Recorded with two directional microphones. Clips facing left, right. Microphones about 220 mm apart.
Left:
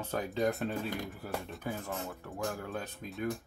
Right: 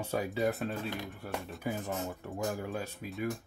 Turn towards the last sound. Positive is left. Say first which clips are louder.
# right 1 dB
turn(degrees=-5)  # may be behind; listen again after turning